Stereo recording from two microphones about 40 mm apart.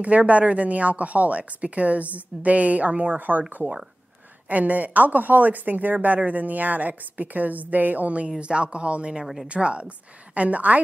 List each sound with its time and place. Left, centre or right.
0.3 s speech: right
8.3 s speech: right
9.2 s a woman's voice: centre
9.5 s speech: right